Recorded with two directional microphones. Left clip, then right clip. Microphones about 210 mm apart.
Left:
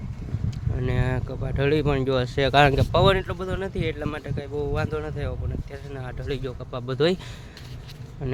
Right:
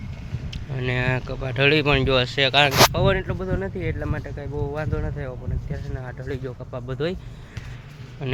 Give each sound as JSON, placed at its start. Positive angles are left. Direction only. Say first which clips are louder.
{"t": 0.7, "sound": "speech", "louder": "right 4 dB", "side_deg": 10}
{"t": 2.2, "sound": "speech", "louder": "right 3 dB", "side_deg": 25}
{"t": 2.5, "sound": "speech", "louder": "right 2 dB", "side_deg": 45}
{"t": 3.2, "sound": "speech", "louder": "right 1 dB", "side_deg": 10}
{"t": 6.8, "sound": "speech", "louder": "left 5 dB", "side_deg": 30}